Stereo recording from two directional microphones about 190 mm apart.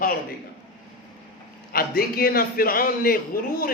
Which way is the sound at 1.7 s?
50° left (ahead or behind).